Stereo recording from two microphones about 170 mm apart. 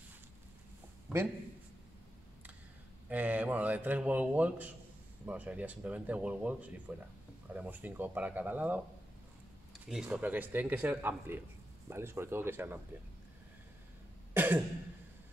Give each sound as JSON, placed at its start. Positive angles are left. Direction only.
{"t": 3.1, "sound": "a man's voice", "side_deg": -10}
{"t": 9.8, "sound": "a man's voice", "side_deg": -5}
{"t": 14.3, "sound": "cough", "side_deg": -10}